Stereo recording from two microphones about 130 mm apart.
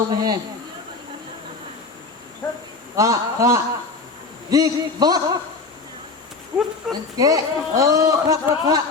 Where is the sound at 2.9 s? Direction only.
25° right (ahead or behind).